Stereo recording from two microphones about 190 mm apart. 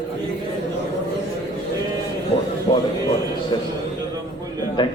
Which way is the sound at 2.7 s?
25° left (ahead or behind).